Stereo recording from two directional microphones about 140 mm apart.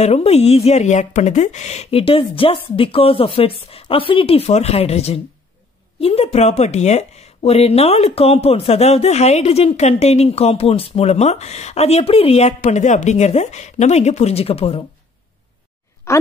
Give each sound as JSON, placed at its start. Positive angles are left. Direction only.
{"t": 0.0, "sound": "speech", "side_deg": 50}